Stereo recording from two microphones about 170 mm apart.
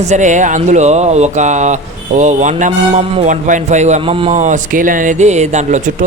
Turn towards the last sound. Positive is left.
turn(degrees=-45)  # may be behind; listen again after turning